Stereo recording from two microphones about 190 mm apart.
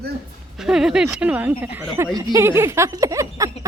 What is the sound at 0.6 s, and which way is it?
Speech, 5° right (ahead or behind).